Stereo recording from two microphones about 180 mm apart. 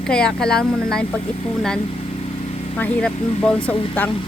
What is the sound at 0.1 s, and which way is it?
Speech, 5° left (ahead or behind).